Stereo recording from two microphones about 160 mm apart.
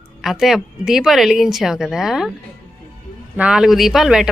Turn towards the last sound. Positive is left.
turn(degrees=0)  # may be behind; listen again after turning